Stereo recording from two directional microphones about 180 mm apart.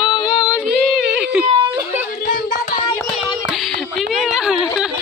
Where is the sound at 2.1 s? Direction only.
50° left (ahead or behind).